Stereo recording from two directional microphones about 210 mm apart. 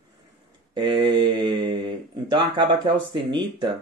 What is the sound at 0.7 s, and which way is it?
Mantra, 20° right (ahead or behind).